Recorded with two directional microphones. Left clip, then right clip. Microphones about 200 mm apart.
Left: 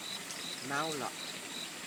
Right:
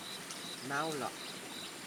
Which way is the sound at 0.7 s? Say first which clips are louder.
Left 1 dB; 5° right (ahead or behind).